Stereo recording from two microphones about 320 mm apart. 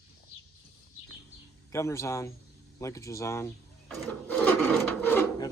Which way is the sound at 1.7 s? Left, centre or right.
Centre.